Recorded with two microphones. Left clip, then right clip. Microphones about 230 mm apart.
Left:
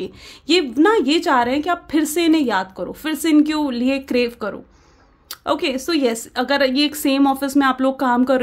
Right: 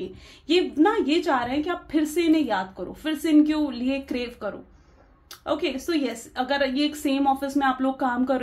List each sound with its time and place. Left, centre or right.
0.0 s a woman's voice: left